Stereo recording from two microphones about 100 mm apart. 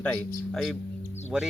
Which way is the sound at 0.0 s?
10° left (ahead or behind).